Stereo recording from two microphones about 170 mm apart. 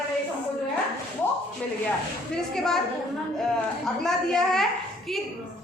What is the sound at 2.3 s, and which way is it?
Speech, 5° left (ahead or behind).